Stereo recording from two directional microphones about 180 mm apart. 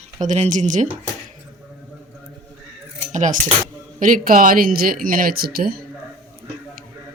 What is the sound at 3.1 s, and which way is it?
Cutlery, 45° right (ahead or behind).